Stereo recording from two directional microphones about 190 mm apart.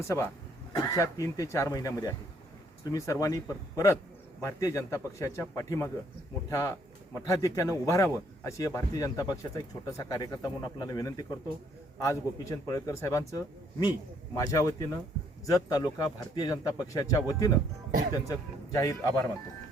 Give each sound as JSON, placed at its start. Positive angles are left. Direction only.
{"t": 0.0, "sound": "a man's voice", "side_deg": 15}